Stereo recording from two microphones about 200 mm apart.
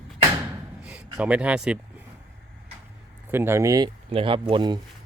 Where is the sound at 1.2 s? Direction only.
5° right (ahead or behind).